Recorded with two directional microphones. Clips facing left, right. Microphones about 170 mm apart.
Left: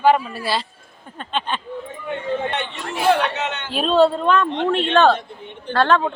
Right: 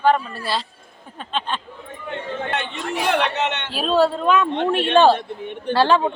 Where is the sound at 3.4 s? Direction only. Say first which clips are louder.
Right 3 dB; 65° right (ahead or behind).